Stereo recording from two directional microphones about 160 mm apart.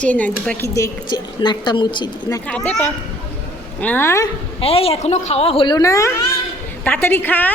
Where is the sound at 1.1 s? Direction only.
30° left (ahead or behind).